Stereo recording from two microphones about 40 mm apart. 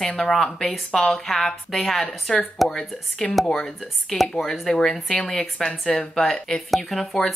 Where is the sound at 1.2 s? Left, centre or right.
Centre.